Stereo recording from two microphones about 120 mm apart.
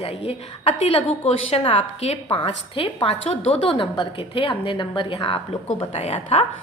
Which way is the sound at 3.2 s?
60° left (ahead or behind).